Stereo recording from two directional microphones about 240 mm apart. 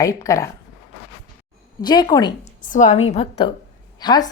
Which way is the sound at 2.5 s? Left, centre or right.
Left.